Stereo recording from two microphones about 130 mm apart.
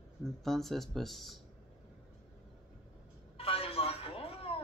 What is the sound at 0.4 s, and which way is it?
Speech, centre (ahead or behind).